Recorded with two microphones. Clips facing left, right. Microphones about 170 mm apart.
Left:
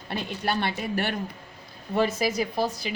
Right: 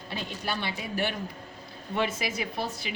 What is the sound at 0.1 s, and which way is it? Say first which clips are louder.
Speech: left 5 dB; 60° left (ahead or behind).